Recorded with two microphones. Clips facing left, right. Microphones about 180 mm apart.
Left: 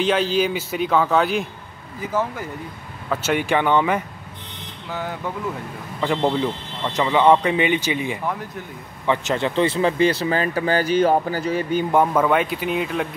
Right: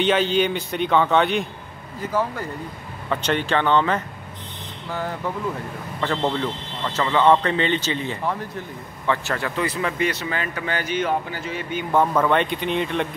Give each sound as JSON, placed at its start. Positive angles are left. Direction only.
{"t": 0.0, "sound": "speech", "side_deg": 0}
{"t": 3.1, "sound": "speech", "side_deg": 5}
{"t": 5.9, "sound": "speech", "side_deg": 10}
{"t": 11.9, "sound": "speech", "side_deg": 10}